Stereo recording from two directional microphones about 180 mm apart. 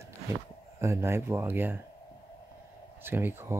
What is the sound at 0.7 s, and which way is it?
Speech, 15° right (ahead or behind).